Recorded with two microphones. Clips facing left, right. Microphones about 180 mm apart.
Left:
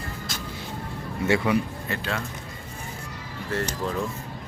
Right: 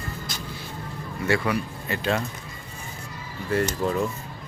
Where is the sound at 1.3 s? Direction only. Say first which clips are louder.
Left 2 dB; 20° left (ahead or behind).